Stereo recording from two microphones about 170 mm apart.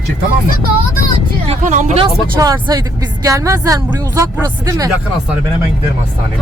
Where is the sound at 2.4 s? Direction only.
20° right (ahead or behind).